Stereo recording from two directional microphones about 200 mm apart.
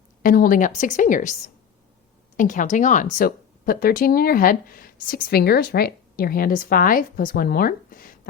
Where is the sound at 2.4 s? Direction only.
40° left (ahead or behind).